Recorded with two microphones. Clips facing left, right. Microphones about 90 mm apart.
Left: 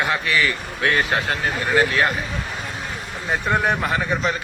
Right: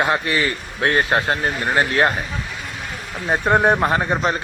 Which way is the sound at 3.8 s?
40° right (ahead or behind).